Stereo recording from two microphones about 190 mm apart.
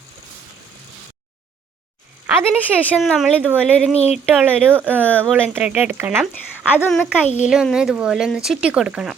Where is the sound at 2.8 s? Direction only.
5° right (ahead or behind).